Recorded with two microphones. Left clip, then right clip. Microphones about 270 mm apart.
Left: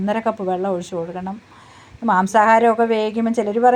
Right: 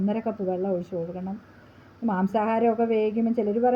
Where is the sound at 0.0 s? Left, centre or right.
Left.